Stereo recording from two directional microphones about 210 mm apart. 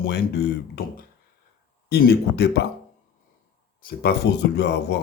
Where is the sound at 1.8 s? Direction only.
50° left (ahead or behind).